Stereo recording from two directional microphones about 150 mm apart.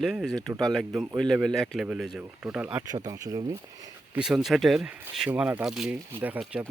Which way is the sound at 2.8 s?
25° right (ahead or behind).